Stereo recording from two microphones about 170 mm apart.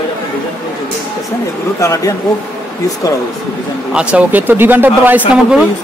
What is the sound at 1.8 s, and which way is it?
Speech, 20° left (ahead or behind).